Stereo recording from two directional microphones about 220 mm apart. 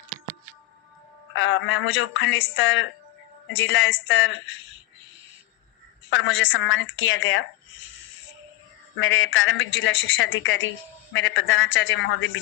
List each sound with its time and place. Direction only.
1.4 s a woman's voice: 60° left (ahead or behind)
6.1 s a woman's voice: 60° left (ahead or behind)
9.0 s a woman's voice: 60° left (ahead or behind)